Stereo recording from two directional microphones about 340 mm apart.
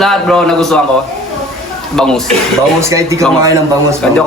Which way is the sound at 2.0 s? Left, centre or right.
Centre.